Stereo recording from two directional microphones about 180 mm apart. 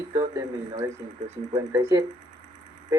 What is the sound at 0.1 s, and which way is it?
Speech, 20° right (ahead or behind).